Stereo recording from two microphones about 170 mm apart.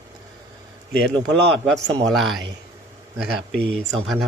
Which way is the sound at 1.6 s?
Centre (ahead or behind).